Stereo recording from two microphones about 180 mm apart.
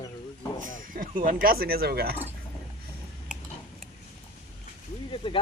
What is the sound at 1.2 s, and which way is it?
Speech, 50° right (ahead or behind).